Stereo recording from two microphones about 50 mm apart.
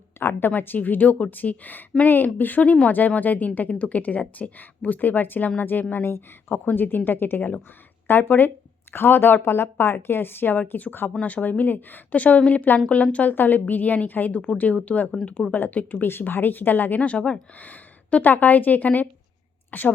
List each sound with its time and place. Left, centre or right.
0.2 s speech: left
5.9 s speech: left
6.7 s a woman's voice: left
13.3 s a woman's voice: left
16.0 s a woman's voice: left